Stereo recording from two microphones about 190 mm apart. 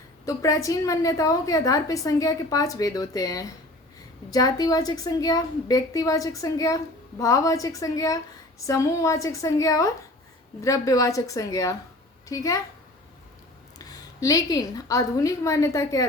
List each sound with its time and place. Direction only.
0.3 s a woman's voice: 15° left (ahead or behind)
13.7 s a woman's voice: 20° left (ahead or behind)